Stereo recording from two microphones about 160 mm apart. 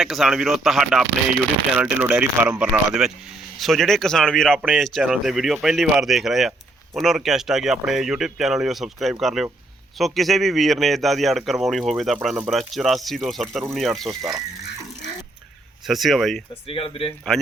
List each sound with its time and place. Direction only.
0.0 s speech: centre (ahead or behind)
14.1 s speech: 20° right (ahead or behind)
15.9 s speech: centre (ahead or behind)
16.6 s speech: 35° left (ahead or behind)
17.3 s speech: centre (ahead or behind)